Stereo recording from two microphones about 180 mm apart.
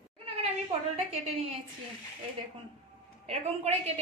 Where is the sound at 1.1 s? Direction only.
35° right (ahead or behind).